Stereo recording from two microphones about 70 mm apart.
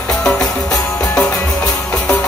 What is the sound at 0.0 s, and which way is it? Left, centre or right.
Music, centre.